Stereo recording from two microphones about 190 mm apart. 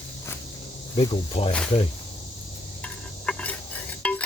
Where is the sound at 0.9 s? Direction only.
30° left (ahead or behind).